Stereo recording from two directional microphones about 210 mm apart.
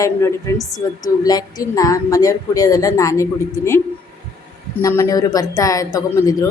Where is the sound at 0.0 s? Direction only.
15° left (ahead or behind).